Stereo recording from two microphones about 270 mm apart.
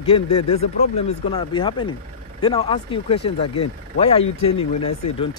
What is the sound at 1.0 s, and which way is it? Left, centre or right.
Speech, left.